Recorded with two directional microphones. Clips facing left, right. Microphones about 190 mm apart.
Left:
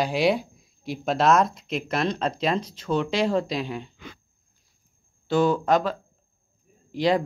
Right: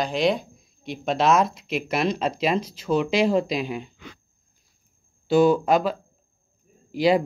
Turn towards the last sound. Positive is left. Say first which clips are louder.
# right 3 dB
turn(degrees=-10)  # may be behind; listen again after turning